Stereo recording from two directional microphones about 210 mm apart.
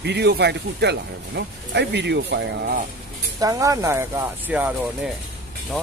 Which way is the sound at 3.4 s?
15° right (ahead or behind).